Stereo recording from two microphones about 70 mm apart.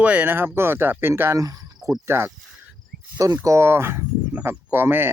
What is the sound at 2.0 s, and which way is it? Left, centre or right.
Speech, right.